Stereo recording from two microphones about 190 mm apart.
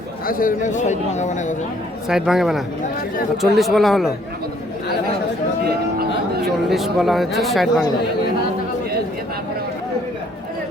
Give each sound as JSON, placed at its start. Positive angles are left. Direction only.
{"t": 0.3, "sound": "speech", "side_deg": 45}
{"t": 2.0, "sound": "speech", "side_deg": 0}
{"t": 6.7, "sound": "speech", "side_deg": 0}